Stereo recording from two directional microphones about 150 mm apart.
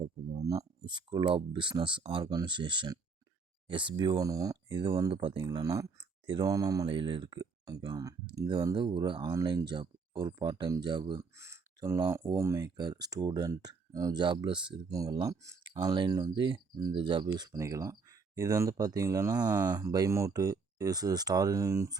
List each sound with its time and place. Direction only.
0.3 s speech: 25° right (ahead or behind)